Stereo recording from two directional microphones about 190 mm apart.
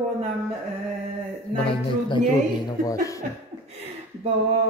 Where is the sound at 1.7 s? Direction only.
25° left (ahead or behind).